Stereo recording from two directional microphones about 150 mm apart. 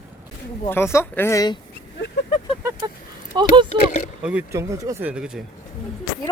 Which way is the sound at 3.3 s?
30° right (ahead or behind).